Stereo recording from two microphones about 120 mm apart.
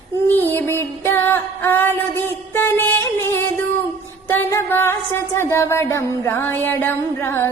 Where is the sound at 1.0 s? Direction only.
20° left (ahead or behind).